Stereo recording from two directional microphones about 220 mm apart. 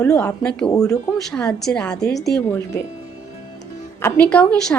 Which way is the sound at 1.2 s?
Centre (ahead or behind).